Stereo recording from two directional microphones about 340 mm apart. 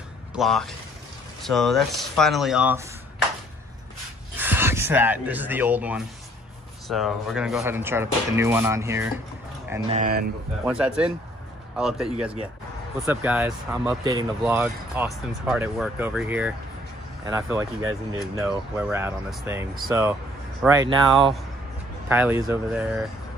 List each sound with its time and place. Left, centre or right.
0.3 s speech: centre
4.4 s speech: centre
9.7 s speech: centre
10.6 s speech: centre